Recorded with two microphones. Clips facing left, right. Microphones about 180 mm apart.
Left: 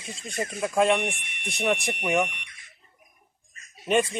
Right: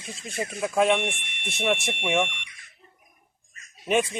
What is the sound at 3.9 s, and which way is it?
Speech, centre (ahead or behind).